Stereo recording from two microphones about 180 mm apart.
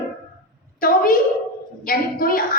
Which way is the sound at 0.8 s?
50° left (ahead or behind).